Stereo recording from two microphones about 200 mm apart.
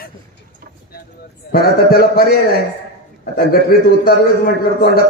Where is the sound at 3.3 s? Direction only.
50° left (ahead or behind).